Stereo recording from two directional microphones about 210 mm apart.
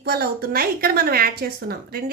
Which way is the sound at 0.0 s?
50° right (ahead or behind).